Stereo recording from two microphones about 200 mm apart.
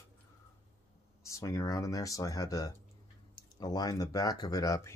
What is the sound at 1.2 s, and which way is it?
Speech, 15° left (ahead or behind).